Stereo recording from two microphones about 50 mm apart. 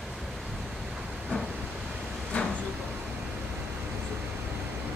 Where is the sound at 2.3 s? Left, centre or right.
Left.